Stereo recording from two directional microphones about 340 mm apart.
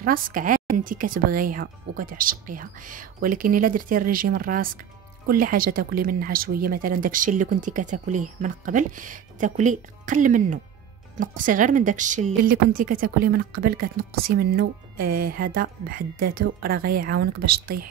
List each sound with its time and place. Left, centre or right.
0.0 s speech: right